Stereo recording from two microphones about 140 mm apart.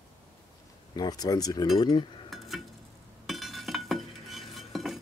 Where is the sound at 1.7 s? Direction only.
30° left (ahead or behind).